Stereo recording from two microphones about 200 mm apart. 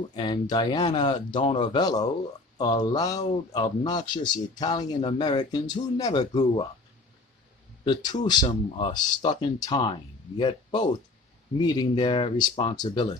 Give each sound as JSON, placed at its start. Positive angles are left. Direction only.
{"t": 0.1, "sound": "speech", "side_deg": 20}
{"t": 7.8, "sound": "speech", "side_deg": 20}